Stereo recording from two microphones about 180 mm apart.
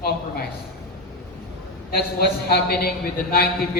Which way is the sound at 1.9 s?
60° left (ahead or behind).